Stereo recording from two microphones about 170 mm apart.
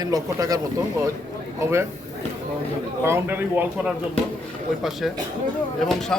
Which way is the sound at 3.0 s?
15° right (ahead or behind).